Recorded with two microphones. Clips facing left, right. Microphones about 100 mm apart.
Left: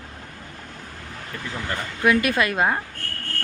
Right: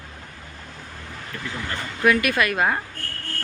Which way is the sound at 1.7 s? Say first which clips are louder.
Even; 25° left (ahead or behind).